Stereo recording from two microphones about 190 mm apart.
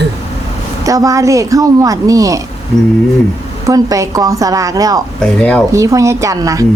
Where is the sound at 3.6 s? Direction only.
15° right (ahead or behind).